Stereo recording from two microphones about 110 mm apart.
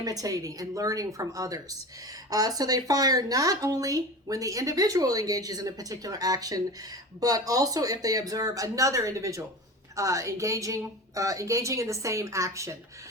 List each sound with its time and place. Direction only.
0.0 s a woman's voice: 35° right (ahead or behind)